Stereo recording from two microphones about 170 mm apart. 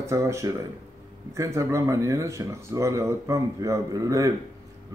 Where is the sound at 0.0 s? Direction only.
15° right (ahead or behind).